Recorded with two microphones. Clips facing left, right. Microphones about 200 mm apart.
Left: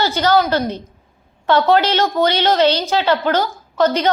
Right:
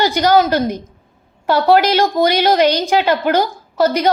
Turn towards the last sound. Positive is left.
turn(degrees=-10)  # may be behind; listen again after turning